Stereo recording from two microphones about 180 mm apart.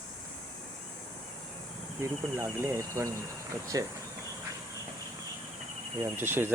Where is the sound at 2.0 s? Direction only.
15° right (ahead or behind).